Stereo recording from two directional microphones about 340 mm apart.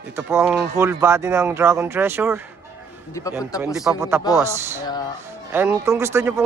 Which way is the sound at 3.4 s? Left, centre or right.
Centre.